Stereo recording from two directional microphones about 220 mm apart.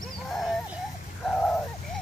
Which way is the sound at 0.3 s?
Centre (ahead or behind).